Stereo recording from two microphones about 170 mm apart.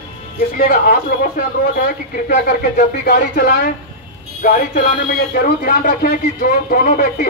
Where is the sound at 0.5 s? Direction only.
60° left (ahead or behind).